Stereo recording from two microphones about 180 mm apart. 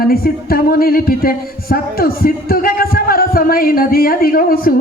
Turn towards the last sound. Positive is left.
turn(degrees=55)  # may be behind; listen again after turning